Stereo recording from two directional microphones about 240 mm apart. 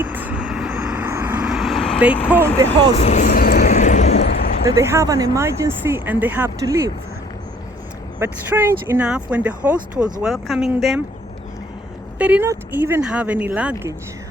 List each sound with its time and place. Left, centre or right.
0.0 s vehicle: centre
2.2 s speech: centre
2.9 s a sound: left
4.2 s a sound: left
4.7 s speech: centre
8.2 s speech: centre
12.2 s speech: centre